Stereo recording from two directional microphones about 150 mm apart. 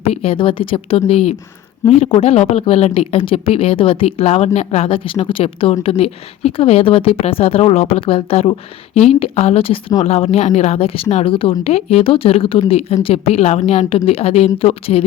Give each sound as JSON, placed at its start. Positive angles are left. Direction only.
{"t": 0.0, "sound": "a woman's voice", "side_deg": 40}